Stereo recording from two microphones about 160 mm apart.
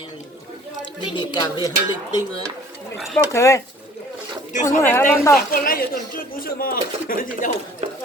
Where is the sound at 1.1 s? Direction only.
25° left (ahead or behind).